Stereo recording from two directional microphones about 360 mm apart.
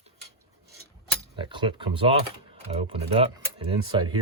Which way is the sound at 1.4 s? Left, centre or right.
Centre.